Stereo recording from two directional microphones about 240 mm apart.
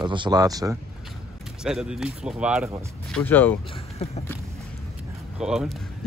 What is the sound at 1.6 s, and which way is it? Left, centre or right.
Speech, centre.